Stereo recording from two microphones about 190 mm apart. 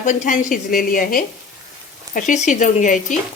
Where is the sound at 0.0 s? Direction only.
40° left (ahead or behind).